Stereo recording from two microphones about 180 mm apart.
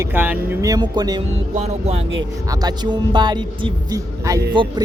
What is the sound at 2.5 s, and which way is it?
Speech, 20° right (ahead or behind).